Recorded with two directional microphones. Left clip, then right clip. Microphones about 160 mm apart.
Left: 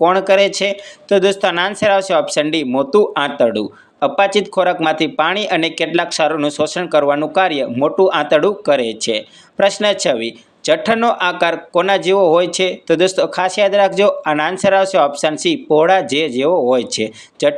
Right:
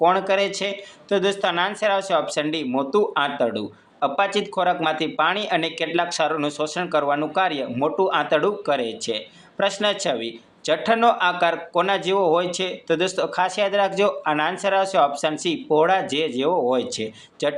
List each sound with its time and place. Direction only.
0.0 s speech: 35° left (ahead or behind)